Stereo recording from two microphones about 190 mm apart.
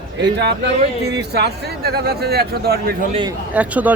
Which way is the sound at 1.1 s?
60° right (ahead or behind).